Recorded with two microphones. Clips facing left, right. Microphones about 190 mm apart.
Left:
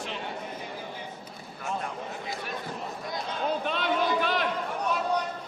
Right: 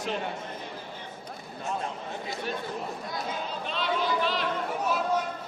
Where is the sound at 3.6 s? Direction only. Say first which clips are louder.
Right 1 dB; 55° left (ahead or behind).